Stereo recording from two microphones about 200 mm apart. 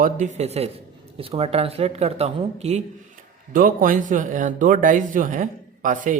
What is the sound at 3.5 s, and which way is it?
Speech, 45° right (ahead or behind).